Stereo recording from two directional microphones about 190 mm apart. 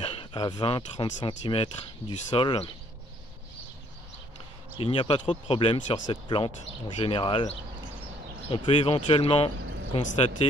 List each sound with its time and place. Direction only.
0.0 s speech: 25° left (ahead or behind)
4.7 s speech: 30° left (ahead or behind)